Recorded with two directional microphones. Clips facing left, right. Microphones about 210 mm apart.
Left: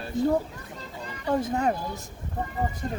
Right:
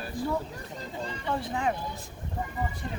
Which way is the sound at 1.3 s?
45° left (ahead or behind).